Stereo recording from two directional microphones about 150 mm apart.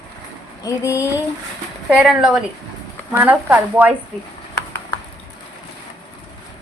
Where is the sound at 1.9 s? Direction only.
5° right (ahead or behind).